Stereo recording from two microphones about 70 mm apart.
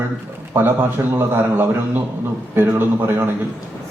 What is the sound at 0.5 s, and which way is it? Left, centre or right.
Speech, right.